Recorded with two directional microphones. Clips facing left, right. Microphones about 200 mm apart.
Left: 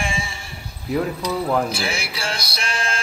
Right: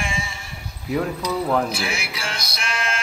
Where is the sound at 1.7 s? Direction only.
30° left (ahead or behind).